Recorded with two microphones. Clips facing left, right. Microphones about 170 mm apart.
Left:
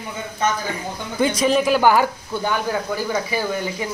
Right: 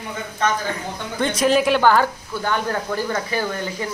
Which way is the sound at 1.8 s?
10° left (ahead or behind).